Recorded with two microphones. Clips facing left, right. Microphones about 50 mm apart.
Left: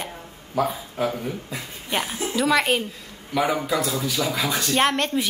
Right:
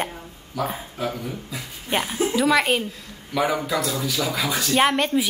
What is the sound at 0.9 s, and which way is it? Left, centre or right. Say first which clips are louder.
Speech: left 5 dB; left.